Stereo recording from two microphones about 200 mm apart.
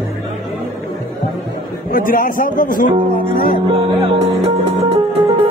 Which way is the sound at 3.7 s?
25° right (ahead or behind).